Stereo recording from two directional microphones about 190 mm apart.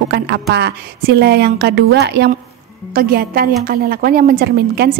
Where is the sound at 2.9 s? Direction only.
50° right (ahead or behind).